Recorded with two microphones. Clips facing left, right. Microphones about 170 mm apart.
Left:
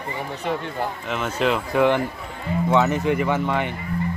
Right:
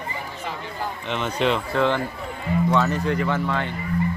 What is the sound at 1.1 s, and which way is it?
Speech, 5° left (ahead or behind).